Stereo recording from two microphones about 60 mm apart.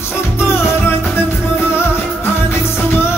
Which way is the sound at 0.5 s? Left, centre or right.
Left.